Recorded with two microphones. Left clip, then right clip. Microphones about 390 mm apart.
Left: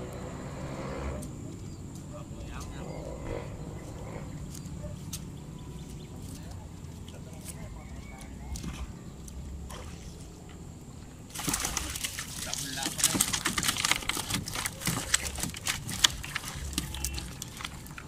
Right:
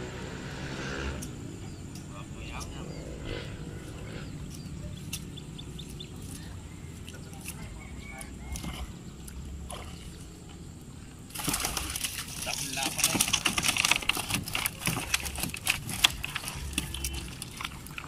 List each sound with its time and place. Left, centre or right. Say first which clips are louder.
0.7 s vehicle: right 2 dB; centre
11.3 s pigeon: right 1 dB; centre